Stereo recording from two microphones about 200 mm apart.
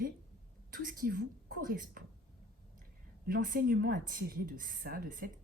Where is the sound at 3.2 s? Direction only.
45° right (ahead or behind).